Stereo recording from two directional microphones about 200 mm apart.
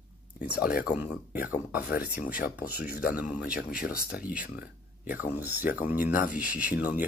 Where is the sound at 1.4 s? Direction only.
55° left (ahead or behind).